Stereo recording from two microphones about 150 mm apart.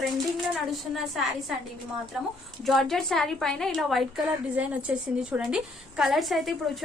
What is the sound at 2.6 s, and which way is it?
A woman's voice, centre (ahead or behind).